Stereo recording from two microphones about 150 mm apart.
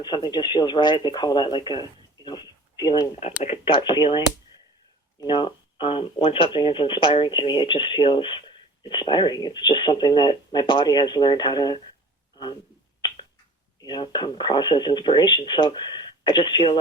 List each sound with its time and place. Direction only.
0.0 s speech: 30° left (ahead or behind)
5.2 s speech: 30° left (ahead or behind)
13.8 s speech: 30° left (ahead or behind)